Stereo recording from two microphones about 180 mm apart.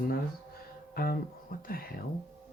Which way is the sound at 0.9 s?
55° left (ahead or behind).